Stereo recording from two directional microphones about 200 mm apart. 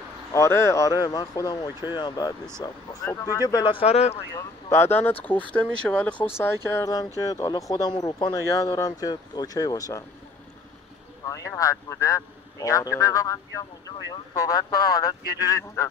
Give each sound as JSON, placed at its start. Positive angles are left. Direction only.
{"t": 0.3, "sound": "speech", "side_deg": 15}
{"t": 4.1, "sound": "speech", "side_deg": 15}
{"t": 11.2, "sound": "speech", "side_deg": 15}